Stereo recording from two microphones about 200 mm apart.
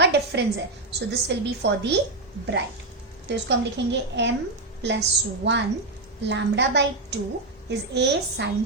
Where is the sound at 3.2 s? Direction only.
60° right (ahead or behind).